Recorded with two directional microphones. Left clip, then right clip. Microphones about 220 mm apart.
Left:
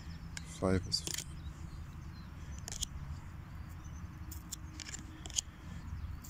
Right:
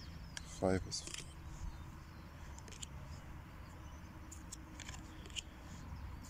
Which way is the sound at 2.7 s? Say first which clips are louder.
Left 12 dB; 30° left (ahead or behind).